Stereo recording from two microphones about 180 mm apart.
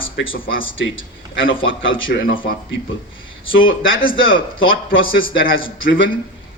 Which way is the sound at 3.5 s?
90° left.